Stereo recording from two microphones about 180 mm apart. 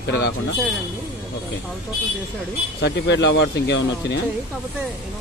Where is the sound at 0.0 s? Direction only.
70° left (ahead or behind).